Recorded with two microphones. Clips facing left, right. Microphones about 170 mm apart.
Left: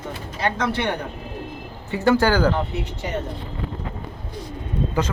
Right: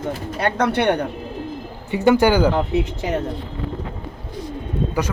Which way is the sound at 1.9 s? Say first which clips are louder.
Right 3 dB; 15° right (ahead or behind).